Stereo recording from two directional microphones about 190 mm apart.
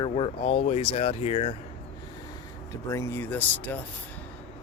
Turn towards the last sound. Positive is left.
turn(degrees=10)  # may be behind; listen again after turning